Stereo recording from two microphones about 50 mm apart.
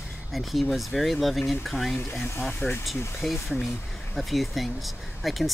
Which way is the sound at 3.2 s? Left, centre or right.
Centre.